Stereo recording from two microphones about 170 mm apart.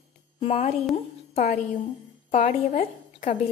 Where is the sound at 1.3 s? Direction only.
50° left (ahead or behind).